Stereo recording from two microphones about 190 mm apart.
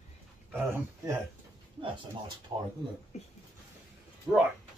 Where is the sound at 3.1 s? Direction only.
35° left (ahead or behind).